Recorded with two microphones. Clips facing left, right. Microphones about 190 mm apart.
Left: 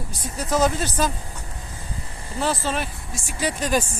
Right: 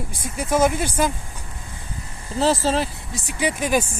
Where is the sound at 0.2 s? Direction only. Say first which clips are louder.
Right 2 dB; 10° right (ahead or behind).